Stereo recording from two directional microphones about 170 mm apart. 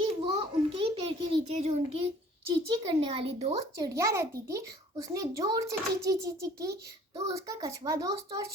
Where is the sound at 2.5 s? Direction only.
30° right (ahead or behind).